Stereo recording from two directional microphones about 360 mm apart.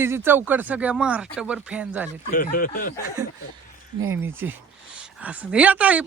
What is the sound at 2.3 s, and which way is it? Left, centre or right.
Speech, left.